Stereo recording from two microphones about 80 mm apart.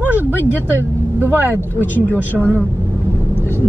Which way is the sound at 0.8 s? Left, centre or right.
Right.